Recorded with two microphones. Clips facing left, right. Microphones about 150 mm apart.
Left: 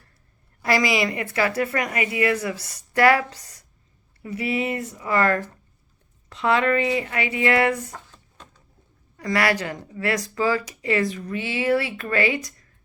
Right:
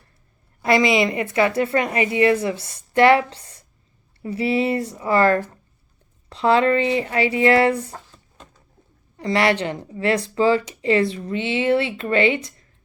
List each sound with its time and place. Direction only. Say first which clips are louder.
0.6 s speech: right 4 dB; 25° right (ahead or behind)
9.1 s speech: right 3 dB; 25° right (ahead or behind)